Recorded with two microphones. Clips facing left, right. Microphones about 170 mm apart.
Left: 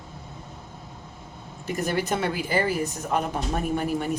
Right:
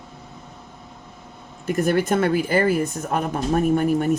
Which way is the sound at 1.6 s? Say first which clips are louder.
Right 6 dB; 55° right (ahead or behind).